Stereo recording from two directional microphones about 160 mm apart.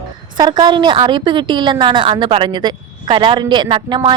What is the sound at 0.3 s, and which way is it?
A woman's voice, 25° right (ahead or behind).